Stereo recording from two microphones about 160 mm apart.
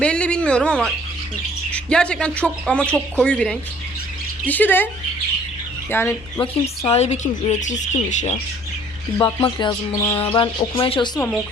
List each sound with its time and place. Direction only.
0.0 s speech: 5° left (ahead or behind)
5.9 s speech: 15° left (ahead or behind)
6.4 s speech: 40° left (ahead or behind)
9.1 s speech: 25° left (ahead or behind)
10.2 s speech: 35° left (ahead or behind)